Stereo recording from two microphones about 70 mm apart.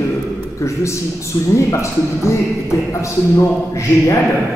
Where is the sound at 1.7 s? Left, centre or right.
Left.